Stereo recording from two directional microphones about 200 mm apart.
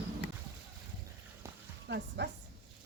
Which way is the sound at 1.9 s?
60° right (ahead or behind).